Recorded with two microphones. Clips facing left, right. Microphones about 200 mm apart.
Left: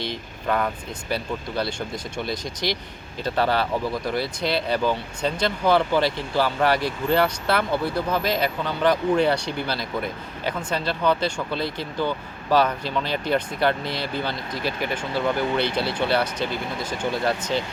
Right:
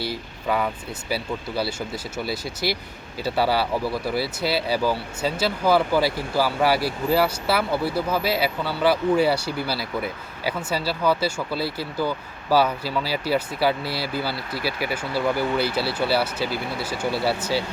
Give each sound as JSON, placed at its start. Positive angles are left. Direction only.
{"t": 0.0, "sound": "speech", "side_deg": -5}